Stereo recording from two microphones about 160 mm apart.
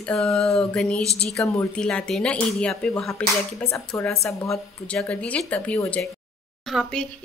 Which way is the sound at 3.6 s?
15° left (ahead or behind).